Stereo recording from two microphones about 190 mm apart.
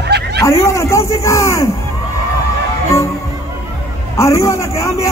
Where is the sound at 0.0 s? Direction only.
60° right (ahead or behind).